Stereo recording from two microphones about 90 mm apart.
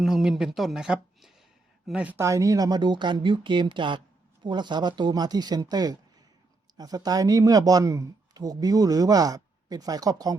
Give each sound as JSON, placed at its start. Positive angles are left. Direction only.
{"t": 0.0, "sound": "a woman's voice", "side_deg": -5}
{"t": 2.1, "sound": "speech", "side_deg": -35}